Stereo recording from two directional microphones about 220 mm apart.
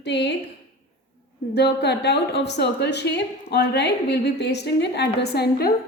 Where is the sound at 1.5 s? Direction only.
50° left (ahead or behind).